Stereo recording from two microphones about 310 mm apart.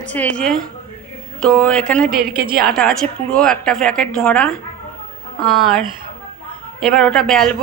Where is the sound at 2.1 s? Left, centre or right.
Right.